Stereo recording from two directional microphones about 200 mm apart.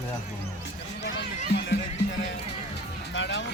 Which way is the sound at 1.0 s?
60° left (ahead or behind).